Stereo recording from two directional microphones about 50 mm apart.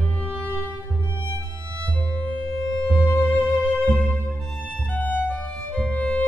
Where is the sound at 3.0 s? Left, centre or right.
Left.